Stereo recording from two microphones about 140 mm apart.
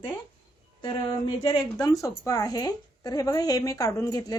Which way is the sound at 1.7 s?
25° left (ahead or behind).